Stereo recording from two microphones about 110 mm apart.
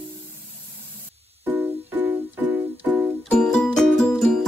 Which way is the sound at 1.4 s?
15° right (ahead or behind).